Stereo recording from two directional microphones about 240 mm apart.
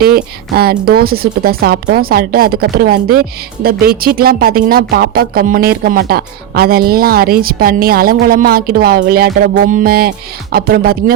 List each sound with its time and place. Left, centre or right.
0.0 s speech: right